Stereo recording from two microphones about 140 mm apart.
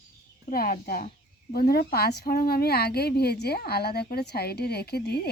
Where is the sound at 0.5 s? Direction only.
90° left.